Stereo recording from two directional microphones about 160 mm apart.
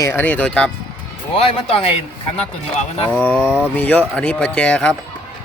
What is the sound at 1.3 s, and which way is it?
Speech, 35° left (ahead or behind).